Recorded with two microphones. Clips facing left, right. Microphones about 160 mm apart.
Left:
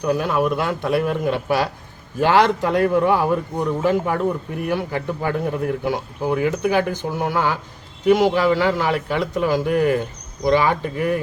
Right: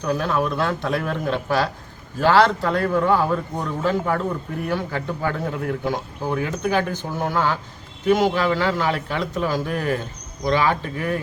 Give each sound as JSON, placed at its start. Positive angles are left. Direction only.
{"t": 0.0, "sound": "a man's voice", "side_deg": 10}